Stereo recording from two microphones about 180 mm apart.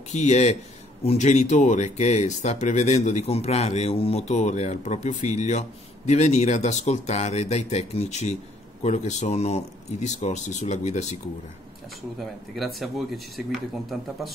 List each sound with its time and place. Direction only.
0.1 s speech: 40° left (ahead or behind)
12.2 s speech: centre (ahead or behind)